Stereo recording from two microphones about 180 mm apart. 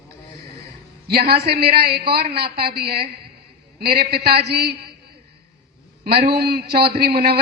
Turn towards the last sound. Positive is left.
turn(degrees=-60)  # may be behind; listen again after turning